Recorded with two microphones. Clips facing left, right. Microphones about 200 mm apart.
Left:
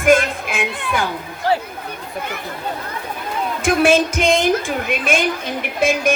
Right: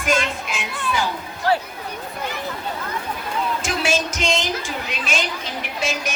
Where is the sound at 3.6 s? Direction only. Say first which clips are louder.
Left 13 dB; 55° left (ahead or behind).